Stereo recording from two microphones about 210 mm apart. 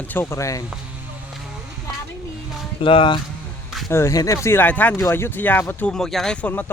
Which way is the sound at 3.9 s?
15° left (ahead or behind).